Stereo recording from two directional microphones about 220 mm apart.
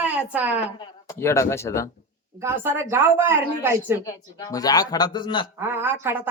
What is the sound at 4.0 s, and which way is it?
Speech, 15° left (ahead or behind).